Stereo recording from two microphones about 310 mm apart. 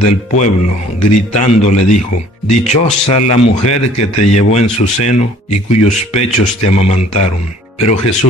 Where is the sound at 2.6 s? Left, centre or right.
Left.